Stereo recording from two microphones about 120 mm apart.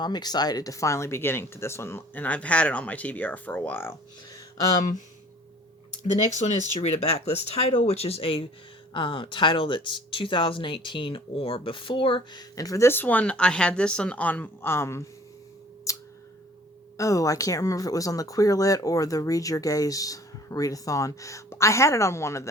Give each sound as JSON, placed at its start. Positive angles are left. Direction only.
{"t": 0.0, "sound": "speech", "side_deg": 35}
{"t": 6.4, "sound": "speech", "side_deg": 75}
{"t": 6.8, "sound": "speech", "side_deg": 60}
{"t": 12.4, "sound": "speech", "side_deg": 30}
{"t": 15.9, "sound": "a sound", "side_deg": 25}
{"t": 17.0, "sound": "speech", "side_deg": 30}